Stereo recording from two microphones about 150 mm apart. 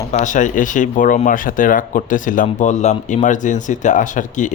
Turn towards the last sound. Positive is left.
turn(degrees=55)  # may be behind; listen again after turning